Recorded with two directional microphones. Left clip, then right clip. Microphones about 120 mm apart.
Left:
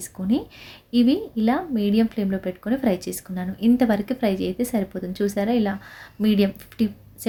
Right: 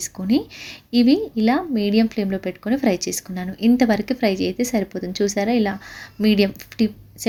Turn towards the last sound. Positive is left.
turn(degrees=-20)  # may be behind; listen again after turning